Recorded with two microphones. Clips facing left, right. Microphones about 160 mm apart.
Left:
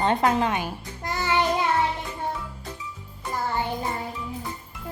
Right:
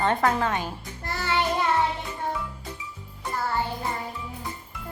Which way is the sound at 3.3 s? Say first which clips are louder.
Even; 15° left (ahead or behind).